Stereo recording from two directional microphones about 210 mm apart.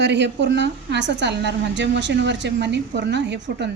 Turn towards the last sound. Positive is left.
turn(degrees=-55)  # may be behind; listen again after turning